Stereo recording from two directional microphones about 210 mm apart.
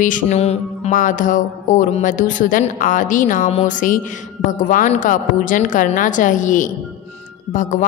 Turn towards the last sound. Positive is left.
turn(degrees=40)  # may be behind; listen again after turning